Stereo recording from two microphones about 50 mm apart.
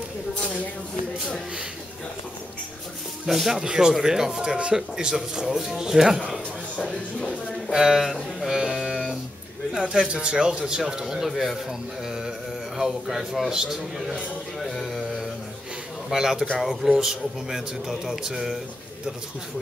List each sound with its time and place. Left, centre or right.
3.3 s a man's voice: centre
7.7 s a man's voice: centre
8.7 s music: centre
9.8 s a man's voice: centre
11.2 s a man's voice: centre
14.6 s music: centre
16.1 s a man's voice: centre